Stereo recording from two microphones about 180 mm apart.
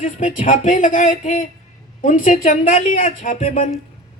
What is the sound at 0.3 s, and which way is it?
A woman's voice, 45° left (ahead or behind).